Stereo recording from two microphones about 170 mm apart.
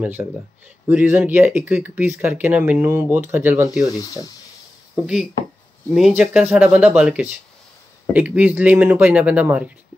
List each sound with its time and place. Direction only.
0.0 s speech: 10° right (ahead or behind)
3.8 s speech: 20° left (ahead or behind)
5.0 s speech: 5° right (ahead or behind)